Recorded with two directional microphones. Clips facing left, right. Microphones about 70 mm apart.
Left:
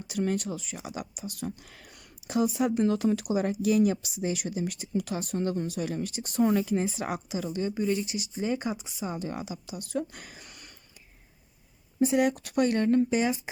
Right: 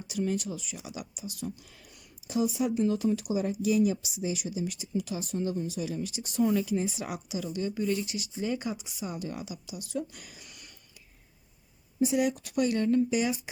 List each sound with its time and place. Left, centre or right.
0.1 s speech: left
2.7 s speech: left
11.9 s speech: left